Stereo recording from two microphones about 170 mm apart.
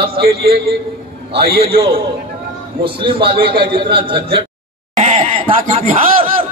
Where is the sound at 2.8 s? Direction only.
30° right (ahead or behind).